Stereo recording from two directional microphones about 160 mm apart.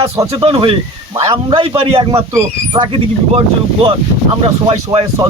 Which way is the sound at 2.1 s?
25° right (ahead or behind).